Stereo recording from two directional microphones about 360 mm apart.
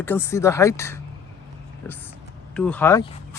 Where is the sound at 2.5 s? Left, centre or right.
Centre.